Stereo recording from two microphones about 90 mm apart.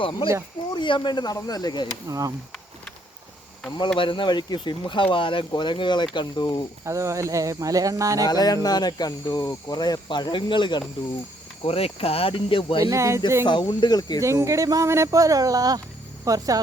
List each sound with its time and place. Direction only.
0.0 s speech: 65° left (ahead or behind)
2.0 s speech: 40° right (ahead or behind)
3.9 s speech: 70° left (ahead or behind)
6.8 s speech: 35° right (ahead or behind)
8.3 s speech: 45° left (ahead or behind)
11.6 s speech: 90° left
12.8 s speech: 35° right (ahead or behind)
13.4 s speech: 55° left (ahead or behind)
14.2 s speech: 35° right (ahead or behind)